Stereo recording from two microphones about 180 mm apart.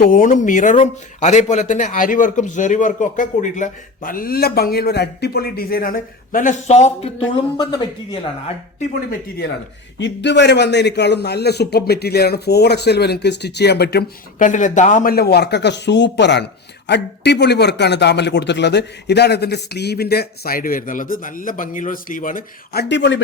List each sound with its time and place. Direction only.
0.0 s speech: 50° left (ahead or behind); by 7.8 s 20° left (ahead or behind)
10.0 s speech: 75° left (ahead or behind)
14.4 s speech: 45° left (ahead or behind); by 23.2 s 90° left